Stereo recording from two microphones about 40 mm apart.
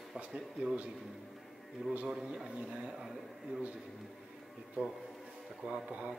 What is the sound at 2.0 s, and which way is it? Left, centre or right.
Speech, centre.